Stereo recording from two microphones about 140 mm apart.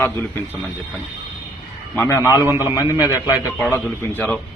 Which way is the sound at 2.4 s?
15° right (ahead or behind).